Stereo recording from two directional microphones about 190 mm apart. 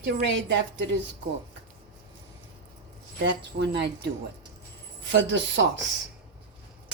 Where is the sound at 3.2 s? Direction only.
65° right (ahead or behind).